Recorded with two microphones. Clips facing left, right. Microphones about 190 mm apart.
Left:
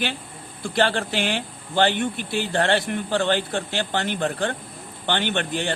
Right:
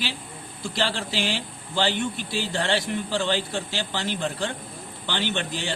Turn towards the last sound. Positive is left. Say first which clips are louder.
# left 3 dB
turn(degrees=55)  # may be behind; listen again after turning